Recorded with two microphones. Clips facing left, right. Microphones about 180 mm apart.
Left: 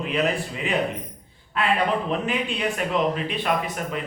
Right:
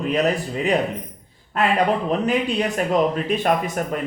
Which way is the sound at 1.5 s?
45° right (ahead or behind).